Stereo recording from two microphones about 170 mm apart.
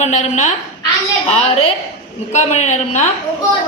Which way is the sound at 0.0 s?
40° left (ahead or behind).